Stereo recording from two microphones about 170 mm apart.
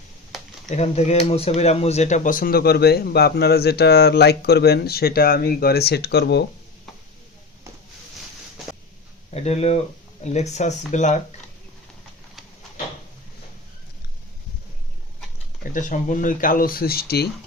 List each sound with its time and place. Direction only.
0.7 s speech: 40° left (ahead or behind); by 6.4 s 75° left (ahead or behind)
9.3 s speech: 40° left (ahead or behind)
15.7 s speech: 50° left (ahead or behind); by 17.2 s 65° left (ahead or behind)